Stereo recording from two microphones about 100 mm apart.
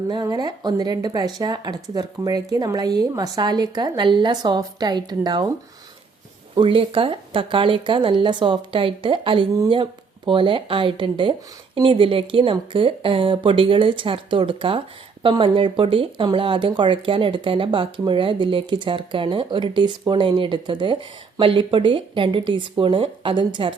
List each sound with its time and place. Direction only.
0.1 s a woman's voice: 45° right (ahead or behind)
6.6 s speech: 60° right (ahead or behind)